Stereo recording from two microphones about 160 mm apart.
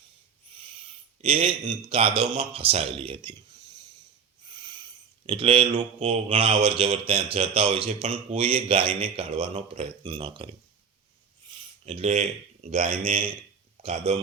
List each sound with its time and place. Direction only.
1.2 s a man's voice: 35° right (ahead or behind)
4.4 s a man's voice: 30° right (ahead or behind)
11.5 s a sound: 30° right (ahead or behind)
11.9 s a man's voice: 45° right (ahead or behind)